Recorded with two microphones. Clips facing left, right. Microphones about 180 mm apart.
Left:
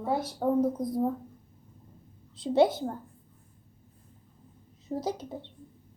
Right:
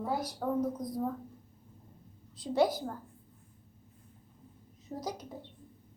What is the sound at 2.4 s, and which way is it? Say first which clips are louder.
Speech: left 5 dB; 25° left (ahead or behind).